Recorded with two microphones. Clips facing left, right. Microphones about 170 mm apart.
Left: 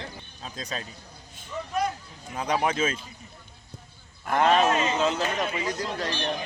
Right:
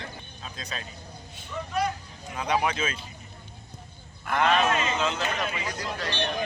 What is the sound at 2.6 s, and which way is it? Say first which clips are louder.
Speech: left 3 dB; 45° left (ahead or behind).